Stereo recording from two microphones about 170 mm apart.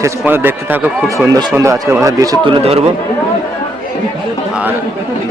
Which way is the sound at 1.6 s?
20° right (ahead or behind).